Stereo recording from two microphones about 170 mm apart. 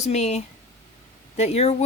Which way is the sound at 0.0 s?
40° left (ahead or behind).